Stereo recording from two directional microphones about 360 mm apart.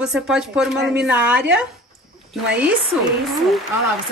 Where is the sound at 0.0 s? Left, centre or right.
Centre.